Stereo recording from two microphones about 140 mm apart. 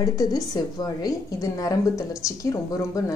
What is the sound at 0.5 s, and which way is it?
A woman's voice, 30° left (ahead or behind).